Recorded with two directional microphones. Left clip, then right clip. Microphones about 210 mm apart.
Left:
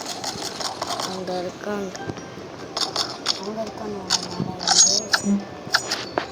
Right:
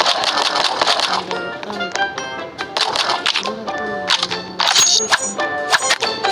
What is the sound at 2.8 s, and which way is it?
Music, 45° right (ahead or behind).